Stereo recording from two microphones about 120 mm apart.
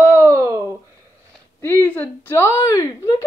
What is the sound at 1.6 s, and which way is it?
Speech, 15° left (ahead or behind).